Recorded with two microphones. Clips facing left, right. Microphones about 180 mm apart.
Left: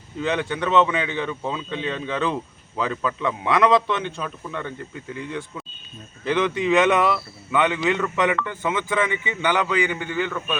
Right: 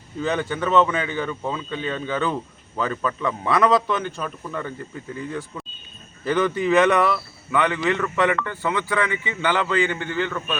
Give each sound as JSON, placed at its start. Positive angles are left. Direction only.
{"t": 0.2, "sound": "speech", "side_deg": 0}
{"t": 6.7, "sound": "speech", "side_deg": 20}